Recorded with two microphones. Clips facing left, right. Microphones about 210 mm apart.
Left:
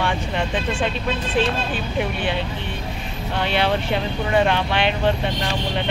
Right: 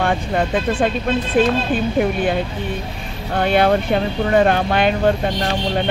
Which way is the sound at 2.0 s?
45° right (ahead or behind).